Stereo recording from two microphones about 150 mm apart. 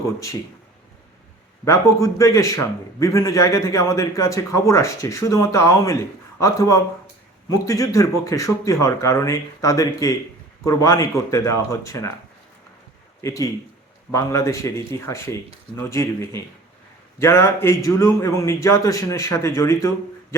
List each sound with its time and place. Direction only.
1.6 s a man's voice: 20° left (ahead or behind)
13.2 s a man's voice: 20° left (ahead or behind)